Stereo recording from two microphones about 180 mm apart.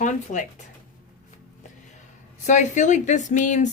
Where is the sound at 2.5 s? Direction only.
40° left (ahead or behind).